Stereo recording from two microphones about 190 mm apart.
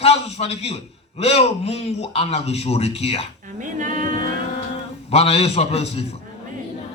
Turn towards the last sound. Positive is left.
turn(degrees=35)  # may be behind; listen again after turning